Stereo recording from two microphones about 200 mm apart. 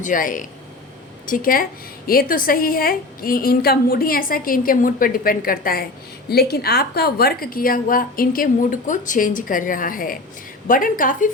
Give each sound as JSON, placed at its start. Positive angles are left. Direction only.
{"t": 0.0, "sound": "a woman's voice", "side_deg": 40}